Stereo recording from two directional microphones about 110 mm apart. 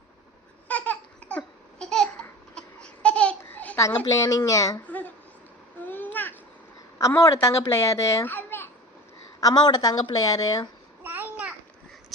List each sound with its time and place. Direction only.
0.7 s babbling: 10° left (ahead or behind)
4.1 s a woman's voice: 30° left (ahead or behind)
4.9 s a sound: 15° left (ahead or behind)
5.8 s babbling: 15° left (ahead or behind)
7.0 s a woman's voice: 30° left (ahead or behind)
9.4 s a woman's voice: 35° left (ahead or behind)
11.0 s babbling: 20° right (ahead or behind)